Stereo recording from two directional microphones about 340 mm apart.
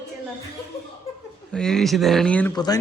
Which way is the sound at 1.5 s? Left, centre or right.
Centre.